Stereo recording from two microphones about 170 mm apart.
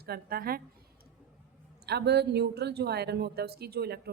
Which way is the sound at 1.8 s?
75° right (ahead or behind).